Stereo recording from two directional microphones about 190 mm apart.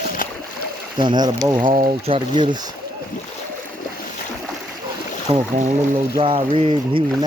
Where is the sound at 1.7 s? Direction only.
45° right (ahead or behind).